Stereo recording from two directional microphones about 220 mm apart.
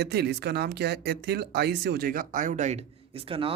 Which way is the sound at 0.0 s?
50° right (ahead or behind).